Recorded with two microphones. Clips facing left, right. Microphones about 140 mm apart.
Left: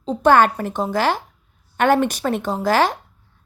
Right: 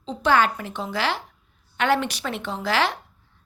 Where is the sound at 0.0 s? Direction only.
45° left (ahead or behind).